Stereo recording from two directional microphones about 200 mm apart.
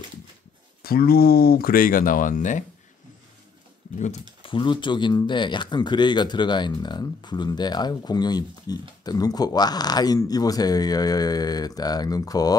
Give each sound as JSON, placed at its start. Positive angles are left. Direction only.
{"t": 0.8, "sound": "speech", "side_deg": 50}
{"t": 4.4, "sound": "speech", "side_deg": 25}